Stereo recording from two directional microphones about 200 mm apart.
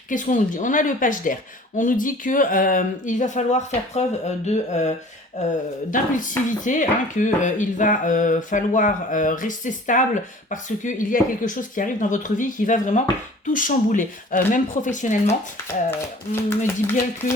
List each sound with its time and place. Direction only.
0.1 s speech: 40° left (ahead or behind)
15.9 s speech: 10° left (ahead or behind)